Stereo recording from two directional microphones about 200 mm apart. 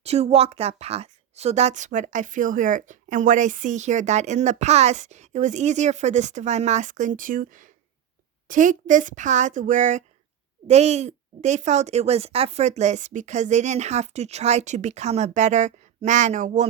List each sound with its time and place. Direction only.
0.0 s a woman's voice: 30° right (ahead or behind)